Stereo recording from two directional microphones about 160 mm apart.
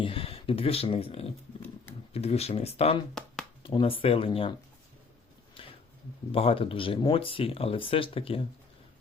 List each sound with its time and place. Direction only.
0.0 s speech: 35° left (ahead or behind)
5.6 s a sound: 35° left (ahead or behind)
6.3 s speech: 35° left (ahead or behind)